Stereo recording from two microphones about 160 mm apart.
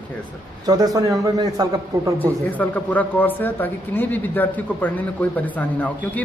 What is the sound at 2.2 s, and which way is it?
Speech, 10° left (ahead or behind).